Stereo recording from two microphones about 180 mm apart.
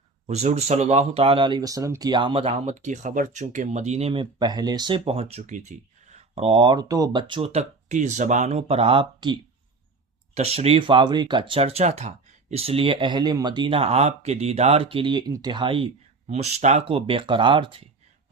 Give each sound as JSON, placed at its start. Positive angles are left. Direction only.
{"t": 0.3, "sound": "speech", "side_deg": -35}